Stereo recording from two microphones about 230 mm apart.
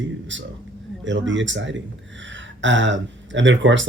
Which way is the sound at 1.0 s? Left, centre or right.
Right.